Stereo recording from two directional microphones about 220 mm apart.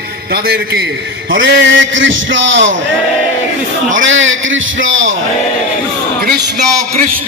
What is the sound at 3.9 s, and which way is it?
A man's voice, 60° right (ahead or behind).